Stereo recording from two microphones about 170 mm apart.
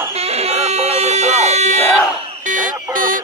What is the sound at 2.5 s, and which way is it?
Buzzer, 50° right (ahead or behind).